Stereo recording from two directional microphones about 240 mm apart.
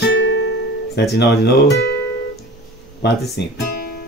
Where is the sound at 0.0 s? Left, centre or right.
Left.